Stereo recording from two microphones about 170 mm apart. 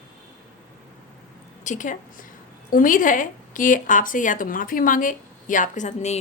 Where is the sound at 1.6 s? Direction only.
45° left (ahead or behind).